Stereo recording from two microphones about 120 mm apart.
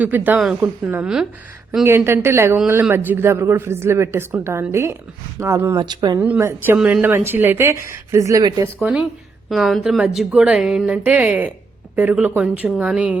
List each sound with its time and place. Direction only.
0.0 s a woman's voice: 15° right (ahead or behind)
1.0 s a woman's voice: 5° right (ahead or behind)
1.8 s speech: 20° right (ahead or behind)
5.7 s speech: 35° right (ahead or behind)
6.1 s a woman's voice: 15° right (ahead or behind)
8.8 s a woman's voice: 10° right (ahead or behind)